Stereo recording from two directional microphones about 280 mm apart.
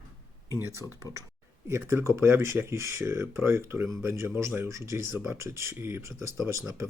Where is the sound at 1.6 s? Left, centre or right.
Centre.